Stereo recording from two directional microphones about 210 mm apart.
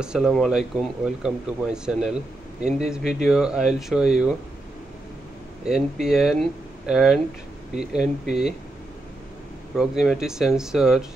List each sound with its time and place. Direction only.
0.0 s speech: centre (ahead or behind)
5.7 s speech: centre (ahead or behind)
9.8 s speech: centre (ahead or behind)